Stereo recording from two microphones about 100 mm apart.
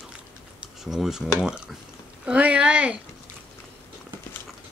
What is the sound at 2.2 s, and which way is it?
Speech, 15° right (ahead or behind).